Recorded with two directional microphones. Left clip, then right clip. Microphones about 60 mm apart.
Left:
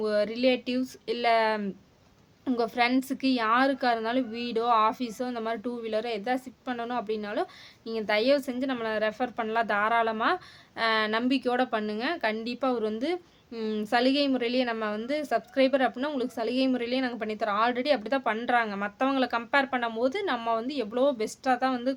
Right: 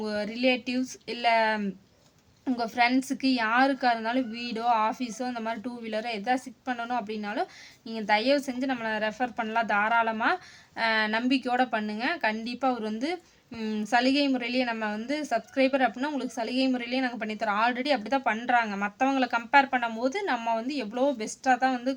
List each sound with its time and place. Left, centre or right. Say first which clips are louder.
0.0 s a woman's voice: left 3 dB; left